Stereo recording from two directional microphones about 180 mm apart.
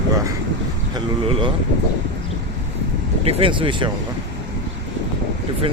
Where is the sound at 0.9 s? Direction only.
30° right (ahead or behind).